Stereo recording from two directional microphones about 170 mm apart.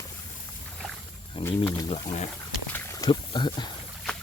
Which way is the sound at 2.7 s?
15° left (ahead or behind).